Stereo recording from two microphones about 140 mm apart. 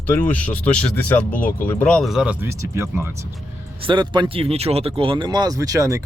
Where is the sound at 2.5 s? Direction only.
20° right (ahead or behind).